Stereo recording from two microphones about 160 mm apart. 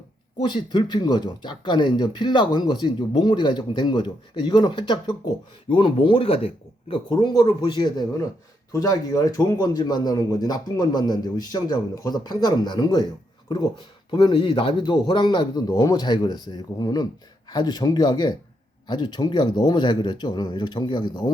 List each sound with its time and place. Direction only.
0.4 s speech: 30° left (ahead or behind)